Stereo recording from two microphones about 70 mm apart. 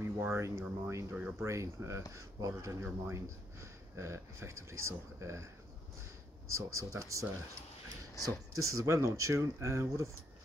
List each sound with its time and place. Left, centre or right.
0.0 s speech: right
6.5 s speech: right
8.6 s speech: right